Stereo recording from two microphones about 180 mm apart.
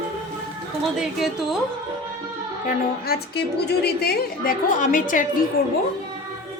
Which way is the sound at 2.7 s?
60° left (ahead or behind).